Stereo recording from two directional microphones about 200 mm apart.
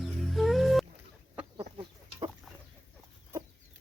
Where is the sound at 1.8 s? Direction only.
25° right (ahead or behind).